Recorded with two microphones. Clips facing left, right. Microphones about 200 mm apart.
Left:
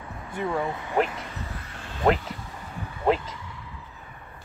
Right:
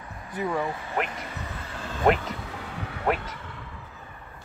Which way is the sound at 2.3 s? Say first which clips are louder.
Right 3 dB; 75° right (ahead or behind).